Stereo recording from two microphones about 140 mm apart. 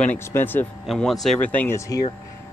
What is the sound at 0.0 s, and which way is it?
Speech, 15° left (ahead or behind).